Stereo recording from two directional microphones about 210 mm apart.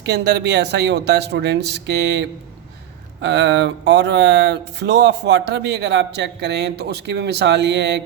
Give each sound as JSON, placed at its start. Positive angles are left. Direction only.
{"t": 0.0, "sound": "speech", "side_deg": -55}